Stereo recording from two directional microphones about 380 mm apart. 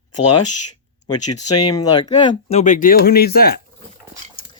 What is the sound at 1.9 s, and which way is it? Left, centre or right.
Speech, centre.